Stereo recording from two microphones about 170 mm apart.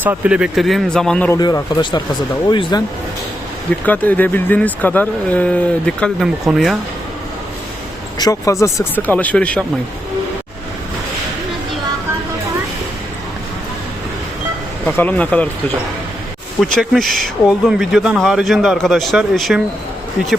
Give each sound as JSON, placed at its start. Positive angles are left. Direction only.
{"t": 0.0, "sound": "speech", "side_deg": -10}
{"t": 1.3, "sound": "speech", "side_deg": 20}
{"t": 3.7, "sound": "speech", "side_deg": 10}
{"t": 8.2, "sound": "speech", "side_deg": 20}
{"t": 14.8, "sound": "speech", "side_deg": 10}
{"t": 16.7, "sound": "speech", "side_deg": 0}